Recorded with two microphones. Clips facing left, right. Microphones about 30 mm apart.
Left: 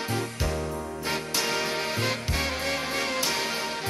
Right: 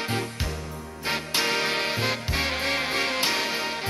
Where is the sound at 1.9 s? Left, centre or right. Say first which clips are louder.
Right 1 dB; right.